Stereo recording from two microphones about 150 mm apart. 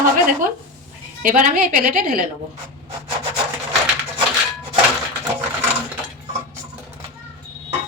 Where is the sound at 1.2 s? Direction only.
70° right (ahead or behind).